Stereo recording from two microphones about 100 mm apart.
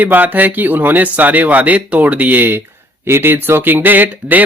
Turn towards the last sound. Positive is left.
turn(degrees=-20)  # may be behind; listen again after turning